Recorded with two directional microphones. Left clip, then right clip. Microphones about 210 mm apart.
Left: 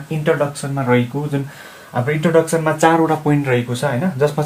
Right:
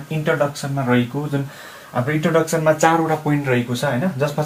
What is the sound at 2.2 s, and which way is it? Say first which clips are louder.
Speech: left 2 dB; 35° left (ahead or behind).